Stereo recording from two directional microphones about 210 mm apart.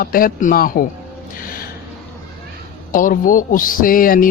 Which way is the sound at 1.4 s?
45° left (ahead or behind).